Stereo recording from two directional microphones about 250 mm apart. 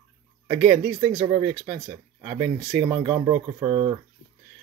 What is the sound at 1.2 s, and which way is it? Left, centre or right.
Speech, right.